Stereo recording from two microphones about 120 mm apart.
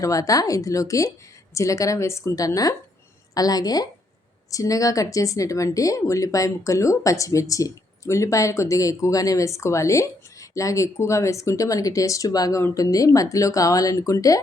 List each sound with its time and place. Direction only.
0.0 s a woman's voice: 30° left (ahead or behind)